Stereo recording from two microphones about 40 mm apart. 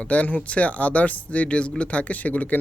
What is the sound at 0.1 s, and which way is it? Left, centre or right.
Speech, left.